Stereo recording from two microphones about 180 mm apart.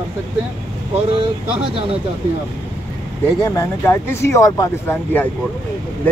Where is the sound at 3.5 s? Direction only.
15° left (ahead or behind).